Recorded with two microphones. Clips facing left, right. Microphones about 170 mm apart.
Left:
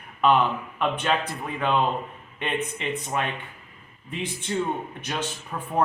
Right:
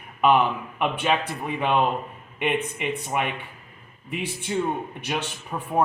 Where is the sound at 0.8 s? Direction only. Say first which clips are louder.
Right 1 dB; 10° right (ahead or behind).